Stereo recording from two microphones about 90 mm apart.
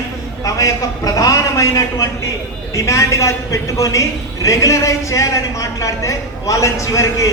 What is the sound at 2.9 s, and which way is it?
A man's voice, 35° left (ahead or behind).